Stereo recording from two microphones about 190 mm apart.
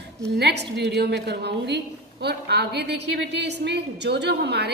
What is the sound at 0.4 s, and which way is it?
A woman's voice, 60° right (ahead or behind).